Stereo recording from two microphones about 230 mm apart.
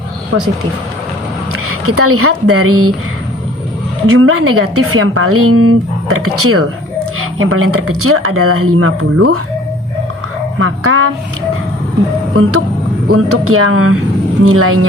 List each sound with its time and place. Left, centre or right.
1.9 s speech: right
4.0 s speech: right
10.6 s speech: right
13.1 s speech: right